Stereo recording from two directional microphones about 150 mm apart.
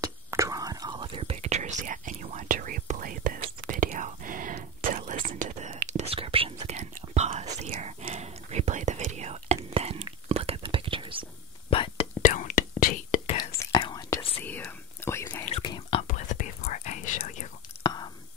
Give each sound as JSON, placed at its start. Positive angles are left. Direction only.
{"t": 0.0, "sound": "whispering", "side_deg": -20}
{"t": 6.9, "sound": "whispering", "side_deg": -60}
{"t": 7.5, "sound": "whispering", "side_deg": -45}
{"t": 11.7, "sound": "whispering", "side_deg": 35}
{"t": 12.2, "sound": "whispering", "side_deg": 60}
{"t": 13.4, "sound": "whispering", "side_deg": 25}
{"t": 14.4, "sound": "whispering", "side_deg": 10}
{"t": 15.6, "sound": "whispering", "side_deg": 35}
{"t": 16.1, "sound": "whispering", "side_deg": 55}